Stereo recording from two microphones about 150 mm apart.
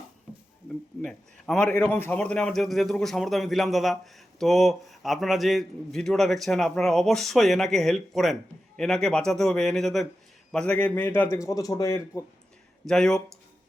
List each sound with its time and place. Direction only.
0.3 s a sound: 5° right (ahead or behind)
1.0 s a man's voice: 5° left (ahead or behind)
12.9 s a man's voice: 5° left (ahead or behind)